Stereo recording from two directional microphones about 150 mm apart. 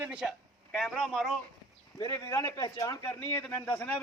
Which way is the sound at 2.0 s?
20° left (ahead or behind).